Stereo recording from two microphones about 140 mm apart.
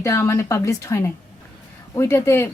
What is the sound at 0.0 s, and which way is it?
Speech, 20° left (ahead or behind).